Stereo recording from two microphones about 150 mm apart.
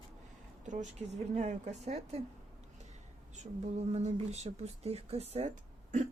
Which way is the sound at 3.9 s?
45° right (ahead or behind).